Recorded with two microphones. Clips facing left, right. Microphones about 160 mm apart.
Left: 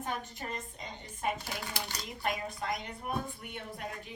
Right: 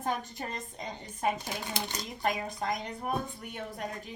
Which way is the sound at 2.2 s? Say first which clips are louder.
Right 3 dB; 40° right (ahead or behind).